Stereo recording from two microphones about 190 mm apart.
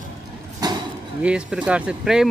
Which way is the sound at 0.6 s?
20° right (ahead or behind).